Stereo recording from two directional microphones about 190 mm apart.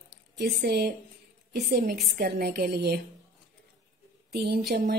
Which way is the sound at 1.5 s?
55° right (ahead or behind).